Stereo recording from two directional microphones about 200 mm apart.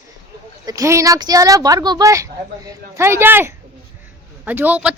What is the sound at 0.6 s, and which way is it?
A woman's voice, 15° right (ahead or behind).